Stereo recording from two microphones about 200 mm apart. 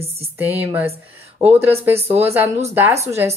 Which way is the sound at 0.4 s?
10° right (ahead or behind).